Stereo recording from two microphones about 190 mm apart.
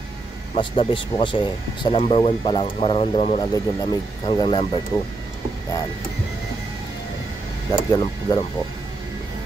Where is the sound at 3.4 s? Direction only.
20° left (ahead or behind).